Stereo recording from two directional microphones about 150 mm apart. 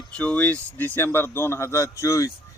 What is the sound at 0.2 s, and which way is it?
Speech, 10° left (ahead or behind).